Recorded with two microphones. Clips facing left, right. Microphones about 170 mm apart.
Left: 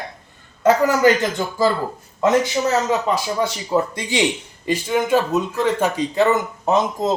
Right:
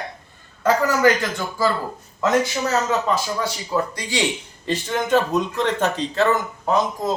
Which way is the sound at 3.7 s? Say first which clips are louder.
Left 3 dB; 20° left (ahead or behind).